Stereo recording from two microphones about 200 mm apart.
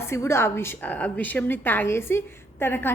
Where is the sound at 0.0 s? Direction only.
15° left (ahead or behind).